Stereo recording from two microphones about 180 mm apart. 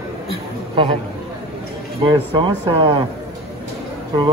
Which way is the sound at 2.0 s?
25° right (ahead or behind).